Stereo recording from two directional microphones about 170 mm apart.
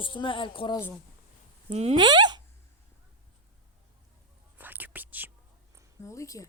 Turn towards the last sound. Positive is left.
turn(degrees=20)  # may be behind; listen again after turning